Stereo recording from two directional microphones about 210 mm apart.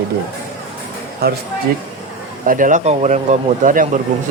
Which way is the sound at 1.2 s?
50° right (ahead or behind).